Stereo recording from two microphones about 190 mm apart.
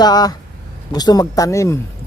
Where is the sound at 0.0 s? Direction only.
20° left (ahead or behind).